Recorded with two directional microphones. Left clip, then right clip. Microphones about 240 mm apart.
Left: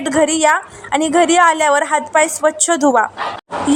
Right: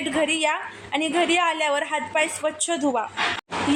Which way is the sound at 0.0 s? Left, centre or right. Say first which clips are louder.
Left 9 dB; left.